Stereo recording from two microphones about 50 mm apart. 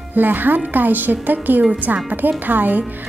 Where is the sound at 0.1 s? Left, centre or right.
Right.